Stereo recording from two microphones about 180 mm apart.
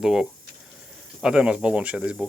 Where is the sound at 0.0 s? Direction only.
Centre (ahead or behind).